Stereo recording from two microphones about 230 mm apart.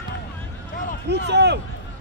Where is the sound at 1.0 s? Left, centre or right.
Right.